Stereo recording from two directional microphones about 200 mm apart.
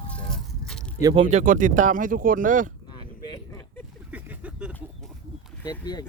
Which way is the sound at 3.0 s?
20° left (ahead or behind).